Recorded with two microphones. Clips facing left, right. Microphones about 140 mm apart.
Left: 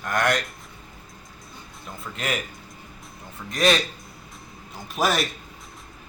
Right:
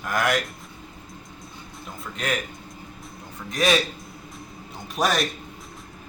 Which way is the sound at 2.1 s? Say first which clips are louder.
Right 1 dB; 5° left (ahead or behind).